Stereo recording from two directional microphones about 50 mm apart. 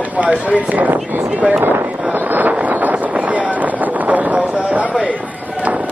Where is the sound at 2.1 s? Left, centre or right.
Right.